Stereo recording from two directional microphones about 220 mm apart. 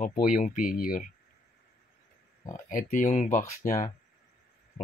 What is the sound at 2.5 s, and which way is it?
Speech, 35° left (ahead or behind).